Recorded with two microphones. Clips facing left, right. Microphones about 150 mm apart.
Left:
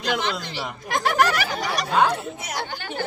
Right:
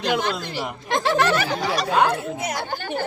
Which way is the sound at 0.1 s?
50° right (ahead or behind).